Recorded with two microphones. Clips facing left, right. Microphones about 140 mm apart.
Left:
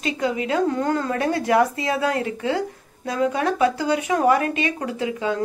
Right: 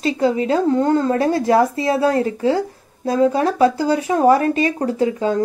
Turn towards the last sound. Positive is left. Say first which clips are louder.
# right 6 dB
turn(degrees=-35)  # may be behind; listen again after turning